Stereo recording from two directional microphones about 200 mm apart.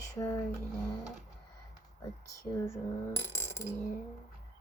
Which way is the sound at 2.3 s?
15° left (ahead or behind).